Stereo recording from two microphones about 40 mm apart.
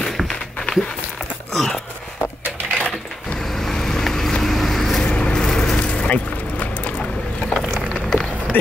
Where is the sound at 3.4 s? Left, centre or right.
Centre.